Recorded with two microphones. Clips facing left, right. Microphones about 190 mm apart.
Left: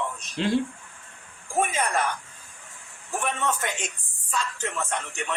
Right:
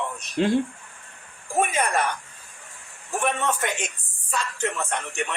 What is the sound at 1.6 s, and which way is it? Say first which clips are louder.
Speech: right 2 dB; 60° right (ahead or behind).